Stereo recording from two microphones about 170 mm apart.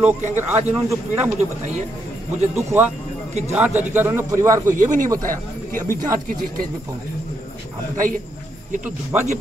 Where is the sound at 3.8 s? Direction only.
15° right (ahead or behind).